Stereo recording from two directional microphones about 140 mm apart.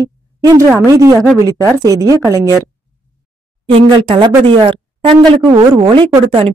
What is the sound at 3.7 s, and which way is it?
Speech, 35° right (ahead or behind).